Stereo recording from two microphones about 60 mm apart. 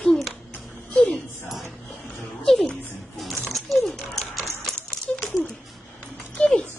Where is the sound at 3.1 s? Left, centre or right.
Centre.